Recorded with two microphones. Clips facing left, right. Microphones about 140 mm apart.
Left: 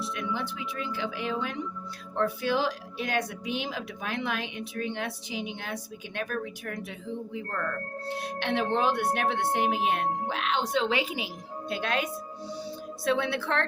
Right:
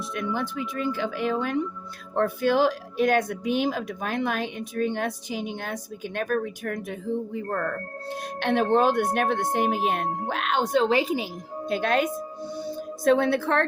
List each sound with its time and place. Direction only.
0.0 s speech: 50° right (ahead or behind)
12.5 s music: 50° right (ahead or behind)